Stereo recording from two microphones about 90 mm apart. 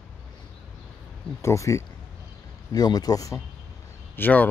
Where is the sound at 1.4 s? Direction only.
35° left (ahead or behind).